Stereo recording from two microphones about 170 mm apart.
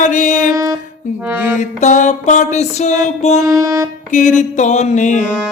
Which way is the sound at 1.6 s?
45° left (ahead or behind).